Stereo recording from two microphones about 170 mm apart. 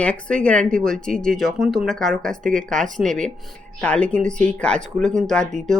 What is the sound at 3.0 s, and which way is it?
Speech, 5° left (ahead or behind).